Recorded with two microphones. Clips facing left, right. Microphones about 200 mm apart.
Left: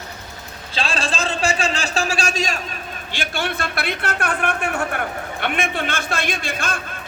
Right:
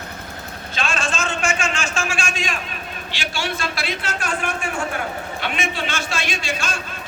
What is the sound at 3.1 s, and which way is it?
A man's voice, 55° left (ahead or behind).